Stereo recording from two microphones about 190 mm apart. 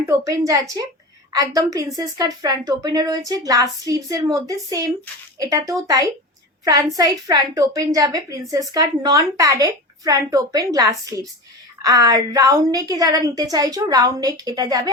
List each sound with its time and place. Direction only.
0.0 s a woman's voice: 15° right (ahead or behind)